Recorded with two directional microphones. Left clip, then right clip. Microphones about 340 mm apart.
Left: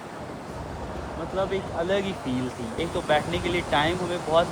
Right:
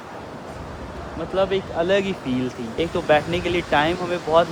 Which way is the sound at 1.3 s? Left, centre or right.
Centre.